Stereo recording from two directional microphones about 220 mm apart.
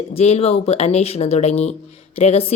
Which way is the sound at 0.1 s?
30° left (ahead or behind).